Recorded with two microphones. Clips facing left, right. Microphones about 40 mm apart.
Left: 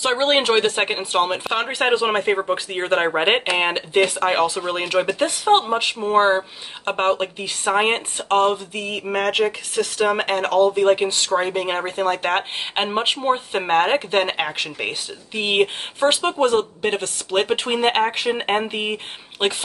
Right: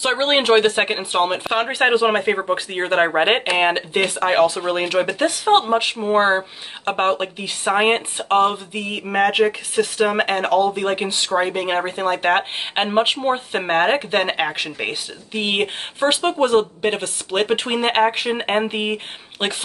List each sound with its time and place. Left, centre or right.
0.0 s speech: centre